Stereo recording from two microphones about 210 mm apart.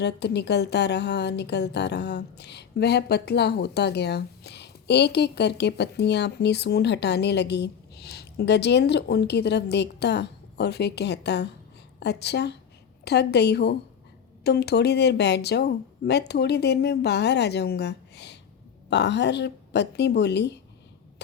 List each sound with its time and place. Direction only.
0.0 s a woman's voice: 55° left (ahead or behind)